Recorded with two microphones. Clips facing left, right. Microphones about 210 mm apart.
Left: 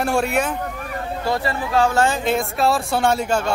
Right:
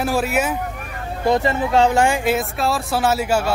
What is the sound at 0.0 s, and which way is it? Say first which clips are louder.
Speech: even; centre (ahead or behind).